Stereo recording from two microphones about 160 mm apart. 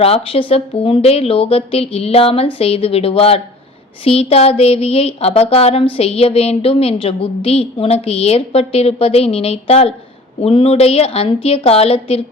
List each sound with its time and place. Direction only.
0.0 s speech: 35° left (ahead or behind)